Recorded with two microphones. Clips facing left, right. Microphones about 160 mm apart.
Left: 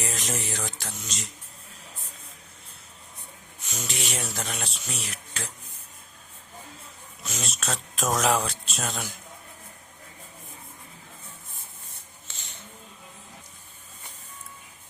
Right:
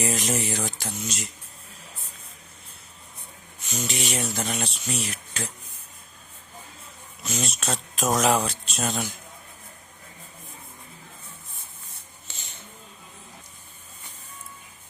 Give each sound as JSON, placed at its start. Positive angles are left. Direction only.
{"t": 0.0, "sound": "speech", "side_deg": -5}
{"t": 3.7, "sound": "speech", "side_deg": 0}
{"t": 7.2, "sound": "speech", "side_deg": 0}